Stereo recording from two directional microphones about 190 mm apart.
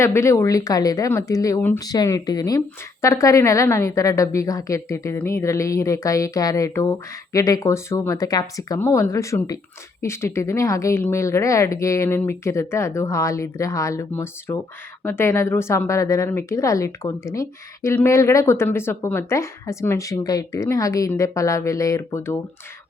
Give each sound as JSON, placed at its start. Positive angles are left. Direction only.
{"t": 0.0, "sound": "speech", "side_deg": 15}